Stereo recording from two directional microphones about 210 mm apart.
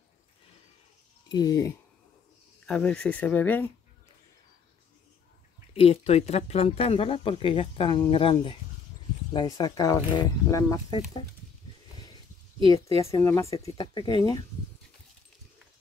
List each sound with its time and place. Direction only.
1.3 s speech: 20° left (ahead or behind)
2.6 s speech: 5° left (ahead or behind)
5.8 s speech: 30° left (ahead or behind)
12.6 s speech: 15° left (ahead or behind)